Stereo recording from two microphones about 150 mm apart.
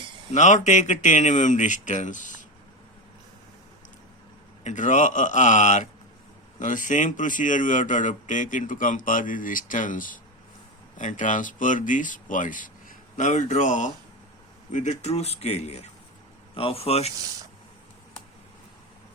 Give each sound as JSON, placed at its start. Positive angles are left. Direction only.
{"t": 0.3, "sound": "a man's voice", "side_deg": 50}
{"t": 4.6, "sound": "a man's voice", "side_deg": 55}